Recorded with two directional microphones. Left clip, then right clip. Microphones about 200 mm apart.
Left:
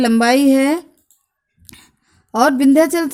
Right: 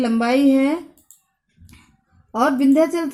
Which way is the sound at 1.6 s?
45° left (ahead or behind).